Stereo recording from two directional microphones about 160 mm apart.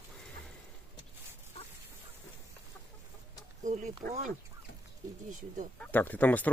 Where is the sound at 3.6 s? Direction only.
55° right (ahead or behind).